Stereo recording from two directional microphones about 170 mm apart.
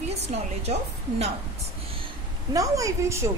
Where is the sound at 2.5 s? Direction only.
20° right (ahead or behind).